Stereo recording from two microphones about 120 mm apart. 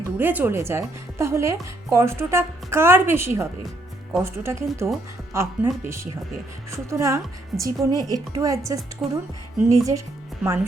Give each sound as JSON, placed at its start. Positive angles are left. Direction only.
{"t": 0.2, "sound": "speech", "side_deg": -15}
{"t": 9.0, "sound": "speech", "side_deg": -5}
{"t": 9.6, "sound": "speech", "side_deg": -25}